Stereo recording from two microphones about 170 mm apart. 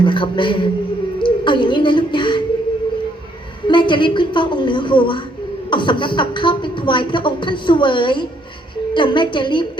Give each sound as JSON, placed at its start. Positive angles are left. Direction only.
{"t": 0.0, "sound": "a woman's voice", "side_deg": 30}
{"t": 3.7, "sound": "a woman's voice", "side_deg": 30}